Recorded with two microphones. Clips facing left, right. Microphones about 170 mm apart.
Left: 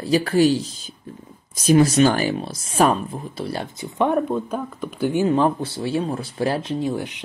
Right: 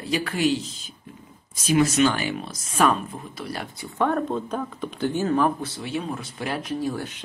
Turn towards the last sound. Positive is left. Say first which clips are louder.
# left 3 dB
turn(degrees=20)  # may be behind; listen again after turning